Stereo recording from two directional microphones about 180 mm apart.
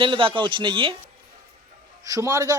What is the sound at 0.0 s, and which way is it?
Speech, 30° right (ahead or behind).